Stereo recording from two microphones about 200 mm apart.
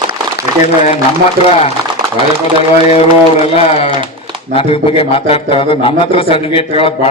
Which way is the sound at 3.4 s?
30° left (ahead or behind).